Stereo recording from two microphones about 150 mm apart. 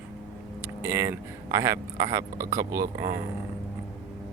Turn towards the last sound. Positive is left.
turn(degrees=-20)  # may be behind; listen again after turning